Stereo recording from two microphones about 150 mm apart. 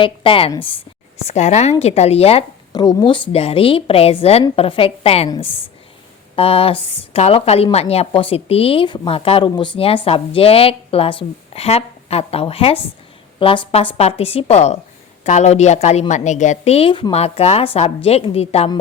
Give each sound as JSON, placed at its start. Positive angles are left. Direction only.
{"t": 0.0, "sound": "speech", "side_deg": 35}
{"t": 1.2, "sound": "a woman's voice", "side_deg": 50}
{"t": 2.7, "sound": "a woman's voice", "side_deg": 30}